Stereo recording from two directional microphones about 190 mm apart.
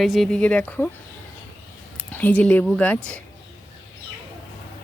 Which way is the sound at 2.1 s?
10° left (ahead or behind).